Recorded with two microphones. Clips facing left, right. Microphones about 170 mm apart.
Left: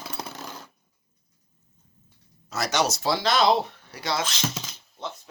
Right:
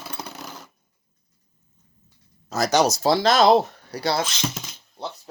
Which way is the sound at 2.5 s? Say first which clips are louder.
Right 6 dB; 40° right (ahead or behind).